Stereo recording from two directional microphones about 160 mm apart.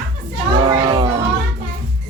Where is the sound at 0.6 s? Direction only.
30° right (ahead or behind).